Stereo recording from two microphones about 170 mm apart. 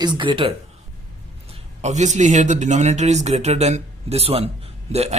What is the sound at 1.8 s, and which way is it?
A man's voice, 40° right (ahead or behind).